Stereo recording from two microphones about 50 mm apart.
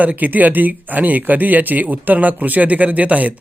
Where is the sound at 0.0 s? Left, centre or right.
Right.